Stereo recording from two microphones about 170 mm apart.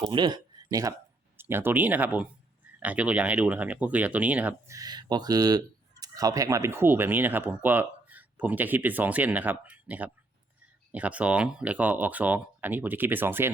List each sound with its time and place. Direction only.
0.1 s speech: 25° right (ahead or behind); by 4.8 s 10° right (ahead or behind)
4.8 s speech: 25° right (ahead or behind)